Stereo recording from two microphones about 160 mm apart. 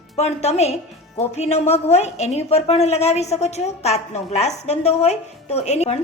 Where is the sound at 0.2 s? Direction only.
40° left (ahead or behind).